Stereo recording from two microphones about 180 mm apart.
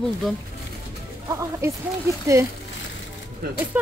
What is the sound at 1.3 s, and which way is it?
Speech, 15° right (ahead or behind).